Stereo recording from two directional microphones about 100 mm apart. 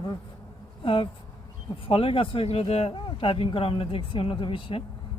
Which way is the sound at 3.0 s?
60° left (ahead or behind).